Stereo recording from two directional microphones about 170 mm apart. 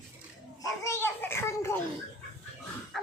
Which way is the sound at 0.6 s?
15° left (ahead or behind).